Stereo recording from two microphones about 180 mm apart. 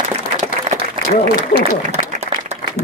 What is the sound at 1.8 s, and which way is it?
Applause, 40° right (ahead or behind).